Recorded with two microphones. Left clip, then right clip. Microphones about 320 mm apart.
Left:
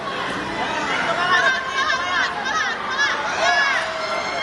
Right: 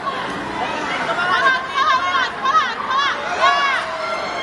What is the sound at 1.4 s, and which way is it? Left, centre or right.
Chatter, centre.